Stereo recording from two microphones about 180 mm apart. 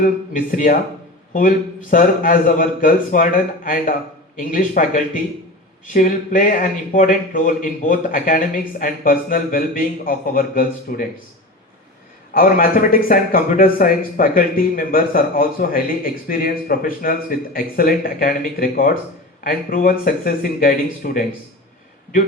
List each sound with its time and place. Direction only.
0.0 s speech: 50° left (ahead or behind)
12.3 s speech: 50° left (ahead or behind)